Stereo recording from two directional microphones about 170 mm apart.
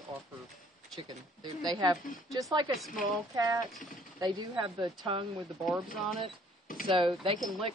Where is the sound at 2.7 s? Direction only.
Centre (ahead or behind).